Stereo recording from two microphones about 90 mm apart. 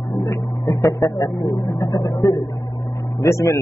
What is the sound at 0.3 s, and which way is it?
Speech, 35° left (ahead or behind).